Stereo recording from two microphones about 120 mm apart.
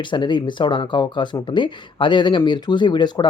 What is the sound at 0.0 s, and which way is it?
Speech, 40° left (ahead or behind).